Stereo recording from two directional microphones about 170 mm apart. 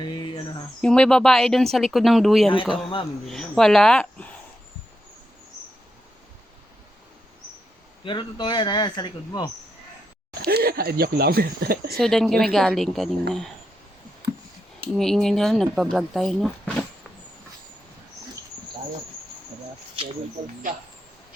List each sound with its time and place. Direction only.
0.0 s a sound: 25° left (ahead or behind)
0.8 s speech: 5° left (ahead or behind)
8.0 s speech: 30° left (ahead or behind)
10.4 s speech: 65° right (ahead or behind)
11.9 s speech: centre (ahead or behind)
14.9 s speech: centre (ahead or behind)